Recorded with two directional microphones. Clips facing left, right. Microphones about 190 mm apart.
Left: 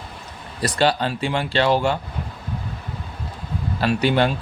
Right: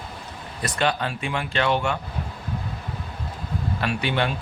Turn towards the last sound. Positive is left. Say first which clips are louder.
# left 6 dB
turn(degrees=35)  # may be behind; listen again after turning